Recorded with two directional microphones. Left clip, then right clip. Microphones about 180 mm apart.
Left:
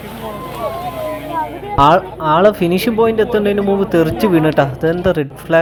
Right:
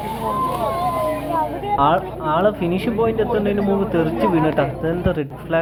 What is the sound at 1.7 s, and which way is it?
Speech, 60° left (ahead or behind).